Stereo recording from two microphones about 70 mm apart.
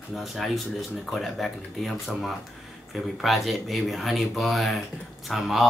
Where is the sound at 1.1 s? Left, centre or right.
Centre.